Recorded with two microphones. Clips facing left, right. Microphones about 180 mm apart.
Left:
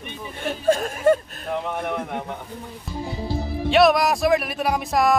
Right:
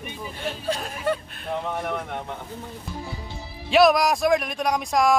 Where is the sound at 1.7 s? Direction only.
5° left (ahead or behind).